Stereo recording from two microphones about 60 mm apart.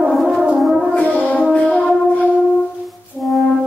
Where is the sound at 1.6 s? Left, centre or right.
Centre.